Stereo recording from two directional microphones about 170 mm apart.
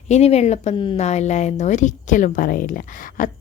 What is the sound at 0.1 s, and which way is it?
A woman's voice, 40° left (ahead or behind).